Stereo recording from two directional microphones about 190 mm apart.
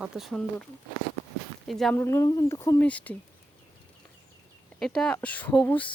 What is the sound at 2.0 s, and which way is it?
Speech, 15° left (ahead or behind).